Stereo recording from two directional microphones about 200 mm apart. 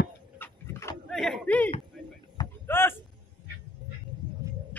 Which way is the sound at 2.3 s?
10° left (ahead or behind).